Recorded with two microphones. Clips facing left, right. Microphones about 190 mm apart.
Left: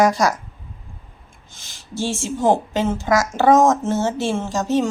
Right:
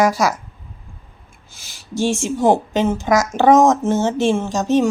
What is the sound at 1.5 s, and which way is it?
Speech, 10° right (ahead or behind).